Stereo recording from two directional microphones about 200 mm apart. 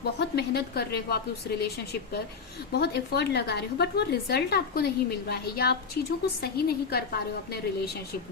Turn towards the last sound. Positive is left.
turn(degrees=55)  # may be behind; listen again after turning